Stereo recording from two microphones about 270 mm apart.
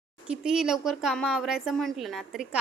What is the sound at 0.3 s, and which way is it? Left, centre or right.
A woman's voice, centre.